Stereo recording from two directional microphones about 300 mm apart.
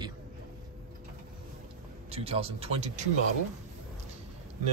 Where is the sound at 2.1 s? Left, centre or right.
Centre.